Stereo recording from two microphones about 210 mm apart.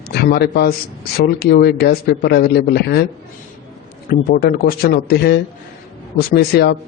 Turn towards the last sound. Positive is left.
turn(degrees=50)  # may be behind; listen again after turning